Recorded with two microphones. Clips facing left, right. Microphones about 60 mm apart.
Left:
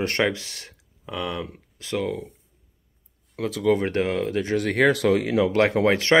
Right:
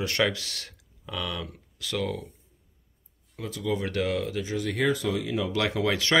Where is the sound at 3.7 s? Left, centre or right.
Left.